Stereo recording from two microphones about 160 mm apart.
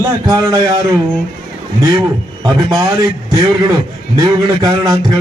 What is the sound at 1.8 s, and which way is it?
A man's voice, 20° right (ahead or behind).